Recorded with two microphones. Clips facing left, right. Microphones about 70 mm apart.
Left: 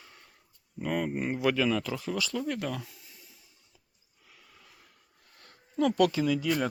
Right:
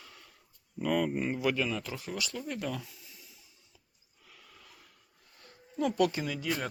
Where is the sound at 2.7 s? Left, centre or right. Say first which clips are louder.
Left 2 dB; left.